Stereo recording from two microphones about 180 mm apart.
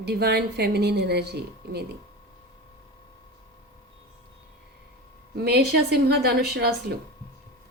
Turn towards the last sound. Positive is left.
turn(degrees=-65)  # may be behind; listen again after turning